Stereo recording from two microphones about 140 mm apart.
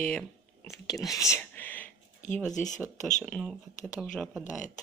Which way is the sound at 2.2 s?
65° left (ahead or behind).